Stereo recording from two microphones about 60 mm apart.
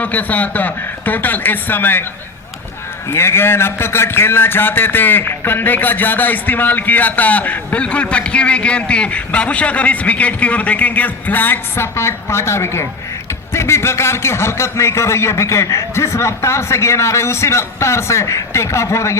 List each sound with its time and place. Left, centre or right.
0.0 s a man's voice: left
3.1 s a man's voice: left